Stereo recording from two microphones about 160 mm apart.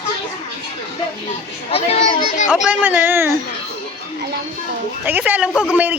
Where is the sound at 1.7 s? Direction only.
40° left (ahead or behind).